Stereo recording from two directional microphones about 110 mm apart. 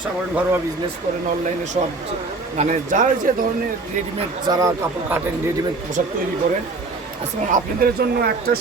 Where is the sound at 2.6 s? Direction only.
90° right.